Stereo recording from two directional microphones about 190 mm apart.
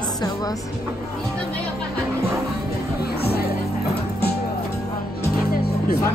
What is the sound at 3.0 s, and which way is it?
Music, 55° left (ahead or behind).